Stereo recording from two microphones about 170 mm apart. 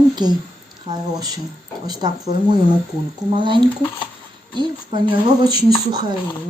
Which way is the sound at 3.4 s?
30° right (ahead or behind).